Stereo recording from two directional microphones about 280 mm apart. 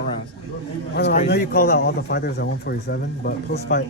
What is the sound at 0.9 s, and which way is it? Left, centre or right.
A man's voice, left.